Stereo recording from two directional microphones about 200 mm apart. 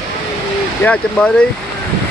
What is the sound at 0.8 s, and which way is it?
Speech, 5° left (ahead or behind).